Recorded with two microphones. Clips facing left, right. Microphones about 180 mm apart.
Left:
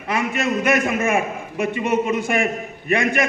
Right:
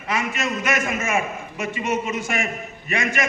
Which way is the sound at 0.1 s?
55° left (ahead or behind).